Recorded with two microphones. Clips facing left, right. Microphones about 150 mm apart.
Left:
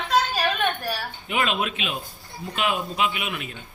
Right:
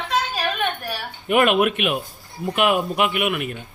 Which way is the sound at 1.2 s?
60° right (ahead or behind).